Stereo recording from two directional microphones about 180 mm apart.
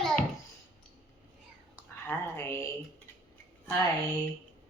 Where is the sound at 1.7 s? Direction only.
10° left (ahead or behind).